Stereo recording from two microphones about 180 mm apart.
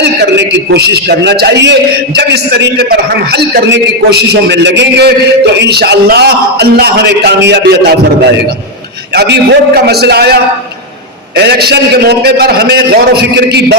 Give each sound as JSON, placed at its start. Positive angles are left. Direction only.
{"t": 0.0, "sound": "a sound", "side_deg": -70}
{"t": 0.5, "sound": "a man's voice", "side_deg": -70}
{"t": 9.1, "sound": "a man's voice", "side_deg": -65}
{"t": 11.3, "sound": "a man's voice", "side_deg": -65}